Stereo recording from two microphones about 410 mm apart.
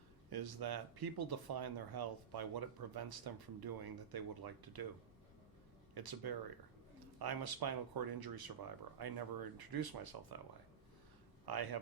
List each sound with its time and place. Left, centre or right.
0.3 s speech: right
5.9 s speech: right
11.4 s speech: right